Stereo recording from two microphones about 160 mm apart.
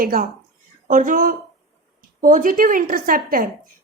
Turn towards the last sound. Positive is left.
turn(degrees=-60)  # may be behind; listen again after turning